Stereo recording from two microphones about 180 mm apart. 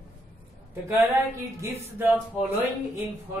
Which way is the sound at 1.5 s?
15° right (ahead or behind).